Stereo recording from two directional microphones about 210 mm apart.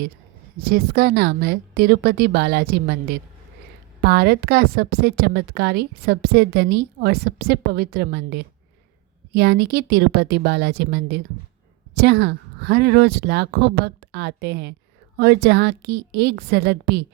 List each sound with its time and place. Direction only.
0.7 s a woman's voice: 45° right (ahead or behind)